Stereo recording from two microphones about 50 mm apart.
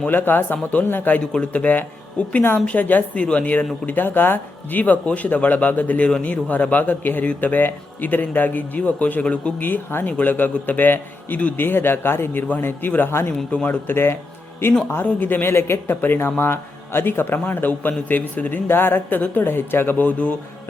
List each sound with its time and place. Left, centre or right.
0.1 s speech: left
1.2 s speech: centre
1.5 s speech: left
9.6 s a man's voice: left
14.6 s a man's voice: left
19.2 s speech: left
19.5 s a man's voice: left
20.0 s speech: left